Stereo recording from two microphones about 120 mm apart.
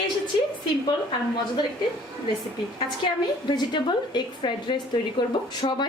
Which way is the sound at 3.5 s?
40° left (ahead or behind).